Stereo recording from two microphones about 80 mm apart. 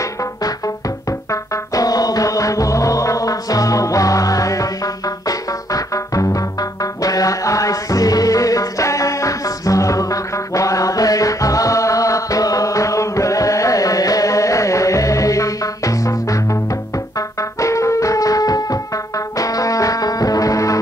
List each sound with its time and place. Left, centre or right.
0.0 s music: left